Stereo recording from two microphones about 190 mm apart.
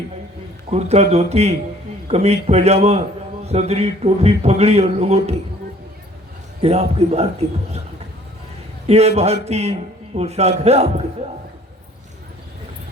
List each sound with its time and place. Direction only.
0.7 s speech: 35° right (ahead or behind)
6.6 s speech: 35° right (ahead or behind)
8.9 s speech: 35° right (ahead or behind)